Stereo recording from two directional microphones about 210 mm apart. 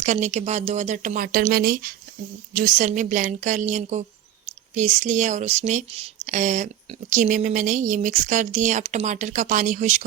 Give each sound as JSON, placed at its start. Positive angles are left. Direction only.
{"t": 0.0, "sound": "speech", "side_deg": -35}